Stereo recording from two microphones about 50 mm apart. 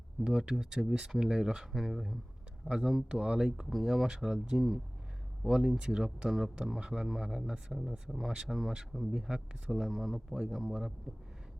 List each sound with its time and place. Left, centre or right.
0.3 s speech: centre
2.6 s speech: centre
3.7 s speech: centre